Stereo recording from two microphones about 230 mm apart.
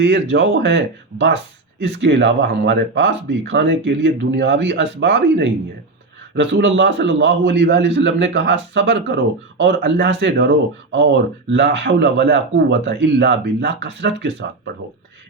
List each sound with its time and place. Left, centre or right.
0.0 s a man's voice: right
2.0 s a man's voice: right